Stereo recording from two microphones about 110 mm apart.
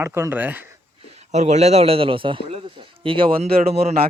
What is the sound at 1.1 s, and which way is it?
A man's voice, 85° right.